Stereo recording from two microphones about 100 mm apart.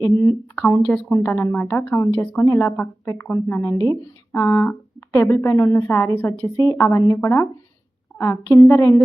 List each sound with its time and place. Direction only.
0.0 s speech: 35° left (ahead or behind)
0.8 s a woman's voice: 10° left (ahead or behind); by 9.0 s 30° left (ahead or behind)